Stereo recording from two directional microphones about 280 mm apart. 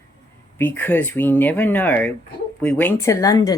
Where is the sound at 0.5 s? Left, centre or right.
Centre.